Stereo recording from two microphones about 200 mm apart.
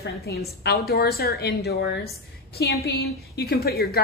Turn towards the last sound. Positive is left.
turn(degrees=50)  # may be behind; listen again after turning